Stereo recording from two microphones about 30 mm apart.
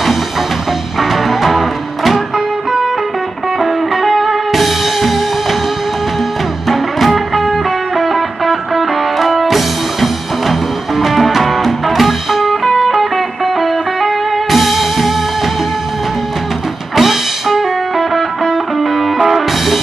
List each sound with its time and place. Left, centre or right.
0.9 s music: centre
3.5 s music: centre
6.7 s music: centre
16.9 s music: centre